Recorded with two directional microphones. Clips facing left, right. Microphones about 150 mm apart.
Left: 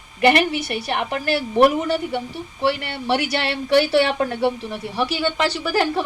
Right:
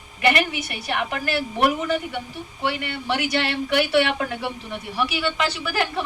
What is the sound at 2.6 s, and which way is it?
Speech, 35° left (ahead or behind).